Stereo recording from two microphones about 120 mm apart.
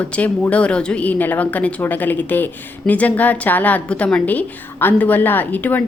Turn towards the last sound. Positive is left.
turn(degrees=15)  # may be behind; listen again after turning